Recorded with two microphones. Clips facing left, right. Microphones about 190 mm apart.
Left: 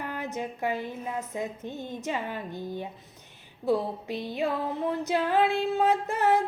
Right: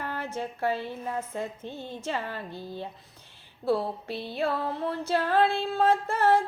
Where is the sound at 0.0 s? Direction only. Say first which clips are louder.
Even; 15° left (ahead or behind).